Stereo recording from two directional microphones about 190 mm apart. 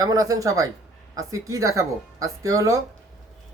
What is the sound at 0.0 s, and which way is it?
Speech, 20° right (ahead or behind).